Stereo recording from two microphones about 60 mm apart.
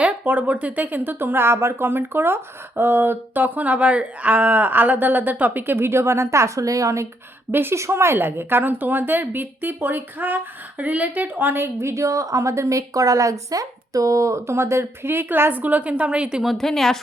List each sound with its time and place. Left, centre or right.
0.0 s a woman's voice: right
7.5 s a woman's voice: right
7.8 s a woman's voice: right; by 16.4 s centre
16.4 s speech: centre